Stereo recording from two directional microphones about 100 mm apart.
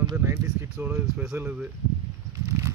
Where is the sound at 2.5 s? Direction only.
30° right (ahead or behind).